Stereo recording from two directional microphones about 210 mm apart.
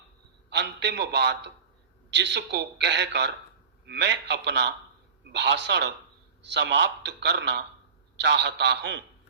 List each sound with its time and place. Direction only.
0.5 s a man's voice: 55° right (ahead or behind)